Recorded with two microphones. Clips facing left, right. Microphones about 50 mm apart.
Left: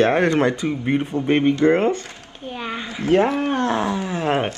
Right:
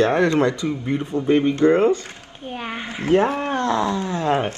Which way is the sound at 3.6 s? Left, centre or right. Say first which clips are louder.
Even; left.